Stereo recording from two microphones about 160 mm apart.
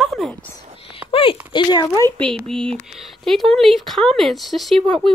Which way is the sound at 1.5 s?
30° left (ahead or behind).